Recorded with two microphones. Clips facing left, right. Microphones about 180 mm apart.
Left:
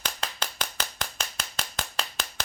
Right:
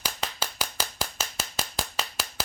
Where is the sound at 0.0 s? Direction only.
10° right (ahead or behind).